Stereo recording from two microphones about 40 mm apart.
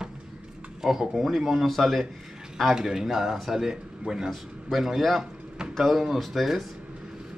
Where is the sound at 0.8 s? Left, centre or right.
Centre.